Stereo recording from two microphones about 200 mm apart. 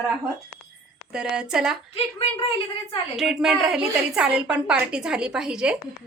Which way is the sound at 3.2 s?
Centre (ahead or behind).